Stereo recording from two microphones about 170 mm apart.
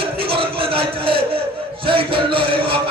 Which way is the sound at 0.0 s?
30° right (ahead or behind).